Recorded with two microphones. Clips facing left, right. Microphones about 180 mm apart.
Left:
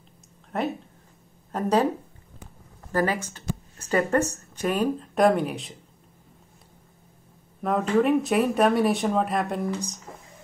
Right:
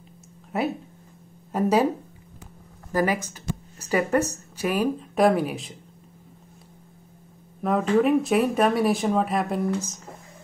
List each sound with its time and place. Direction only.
0.5 s speech: 5° right (ahead or behind)
2.9 s speech: 10° right (ahead or behind)
7.6 s speech: centre (ahead or behind)